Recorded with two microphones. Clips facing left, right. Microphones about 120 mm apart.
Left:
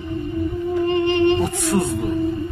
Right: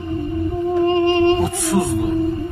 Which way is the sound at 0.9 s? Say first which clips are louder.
Right 1 dB; 45° right (ahead or behind).